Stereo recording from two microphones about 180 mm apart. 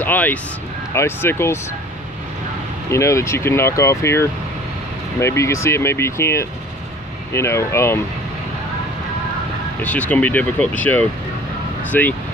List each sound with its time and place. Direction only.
0.0 s speech: 10° left (ahead or behind)
2.9 s speech: 15° left (ahead or behind)
9.8 s speech: 10° left (ahead or behind)